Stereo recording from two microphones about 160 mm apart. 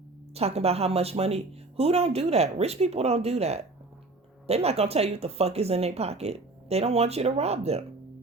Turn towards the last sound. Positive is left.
turn(degrees=-40)  # may be behind; listen again after turning